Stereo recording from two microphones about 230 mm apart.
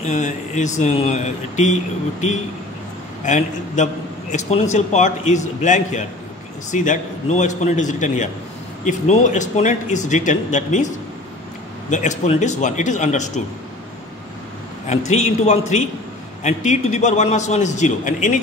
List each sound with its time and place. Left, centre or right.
0.0 s a man's voice: left
3.3 s a man's voice: left
11.9 s a man's voice: left
14.9 s a man's voice: left